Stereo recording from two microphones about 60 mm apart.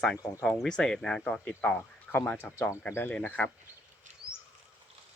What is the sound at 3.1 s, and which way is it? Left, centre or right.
Speech, left.